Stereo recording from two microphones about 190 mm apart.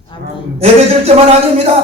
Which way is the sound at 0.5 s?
35° right (ahead or behind).